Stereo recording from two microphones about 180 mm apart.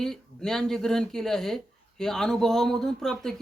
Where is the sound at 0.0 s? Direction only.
Centre (ahead or behind).